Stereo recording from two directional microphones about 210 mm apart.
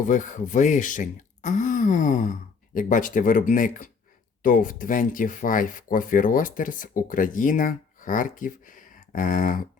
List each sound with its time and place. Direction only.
0.0 s speech: 35° left (ahead or behind)